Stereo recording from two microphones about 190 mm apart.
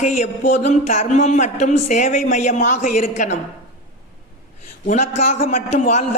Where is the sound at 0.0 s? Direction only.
40° left (ahead or behind).